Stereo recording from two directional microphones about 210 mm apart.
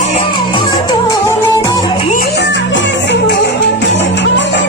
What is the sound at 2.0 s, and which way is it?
Music, 40° left (ahead or behind).